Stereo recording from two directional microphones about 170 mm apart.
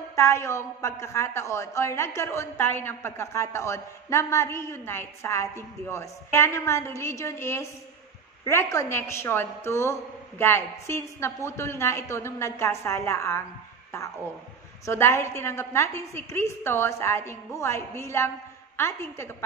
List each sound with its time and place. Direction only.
0.1 s a woman's voice: 15° left (ahead or behind)